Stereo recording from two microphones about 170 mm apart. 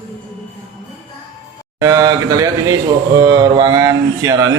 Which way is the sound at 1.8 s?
20° right (ahead or behind).